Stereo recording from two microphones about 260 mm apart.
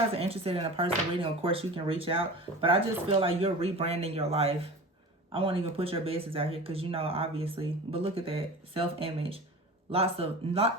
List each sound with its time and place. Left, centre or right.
0.1 s speech: right